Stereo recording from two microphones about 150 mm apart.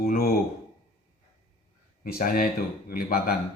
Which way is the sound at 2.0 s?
75° left (ahead or behind).